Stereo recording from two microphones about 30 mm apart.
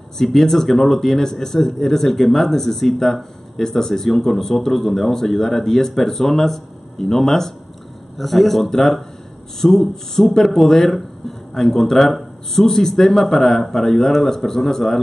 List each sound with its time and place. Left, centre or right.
0.2 s a man's voice: centre